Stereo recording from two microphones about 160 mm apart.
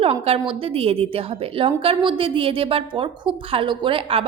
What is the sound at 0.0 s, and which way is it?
A woman's voice, 35° right (ahead or behind).